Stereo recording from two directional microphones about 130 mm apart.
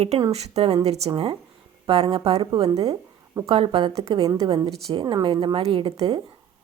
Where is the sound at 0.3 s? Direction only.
55° right (ahead or behind).